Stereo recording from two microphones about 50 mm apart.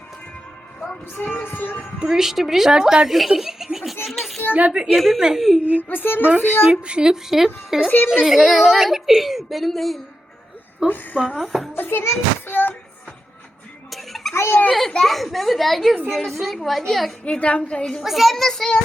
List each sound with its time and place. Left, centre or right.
1.1 s music: left
2.0 s a woman's voice: centre
5.9 s music: left
6.5 s a woman's voice: centre
7.9 s a woman's voice: left
8.1 s speech: centre
10.8 s music: left
11.3 s speech: centre
11.7 s a sound: left
13.9 s a sound: centre
14.3 s a woman's voice: left
14.7 s speech: centre
17.2 s a woman's voice: left
18.0 s speech: centre